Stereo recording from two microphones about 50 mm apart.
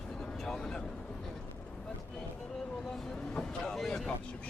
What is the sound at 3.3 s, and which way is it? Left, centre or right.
Vehicle, centre.